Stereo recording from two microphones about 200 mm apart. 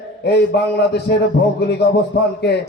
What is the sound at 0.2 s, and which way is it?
A man's voice, 55° left (ahead or behind).